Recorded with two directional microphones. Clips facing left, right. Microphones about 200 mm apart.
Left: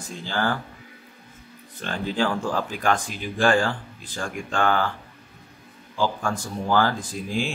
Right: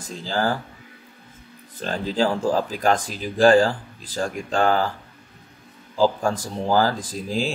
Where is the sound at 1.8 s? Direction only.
35° right (ahead or behind).